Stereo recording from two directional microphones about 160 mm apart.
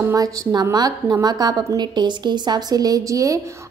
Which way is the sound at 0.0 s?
20° right (ahead or behind).